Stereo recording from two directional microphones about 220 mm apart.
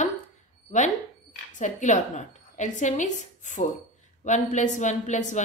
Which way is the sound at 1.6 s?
35° left (ahead or behind).